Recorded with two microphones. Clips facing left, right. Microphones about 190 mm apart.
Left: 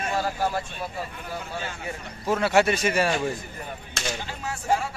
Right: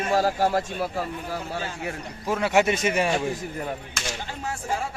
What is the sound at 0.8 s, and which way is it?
Speech, 80° right.